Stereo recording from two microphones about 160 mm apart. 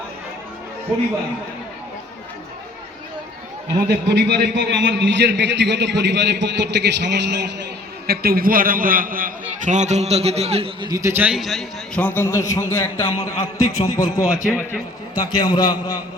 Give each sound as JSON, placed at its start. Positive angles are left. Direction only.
{"t": 3.8, "sound": "a man's voice", "side_deg": -90}
{"t": 10.8, "sound": "a man's voice", "side_deg": -20}
{"t": 15.1, "sound": "a man's voice", "side_deg": 25}